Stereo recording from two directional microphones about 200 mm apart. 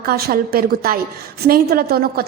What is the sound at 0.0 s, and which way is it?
A woman's voice, 50° right (ahead or behind).